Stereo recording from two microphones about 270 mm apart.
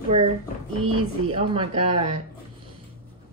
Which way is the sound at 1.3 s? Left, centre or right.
Right.